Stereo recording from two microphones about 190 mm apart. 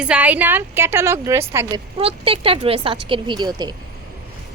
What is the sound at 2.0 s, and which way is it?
A woman's voice, 30° right (ahead or behind).